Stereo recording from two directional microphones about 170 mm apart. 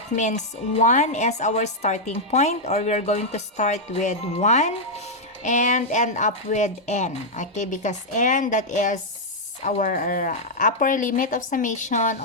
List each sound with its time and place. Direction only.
0.2 s a woman's voice: 45° left (ahead or behind)